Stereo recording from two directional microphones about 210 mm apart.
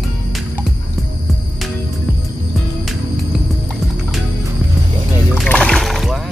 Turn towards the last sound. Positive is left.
turn(degrees=0)  # may be behind; listen again after turning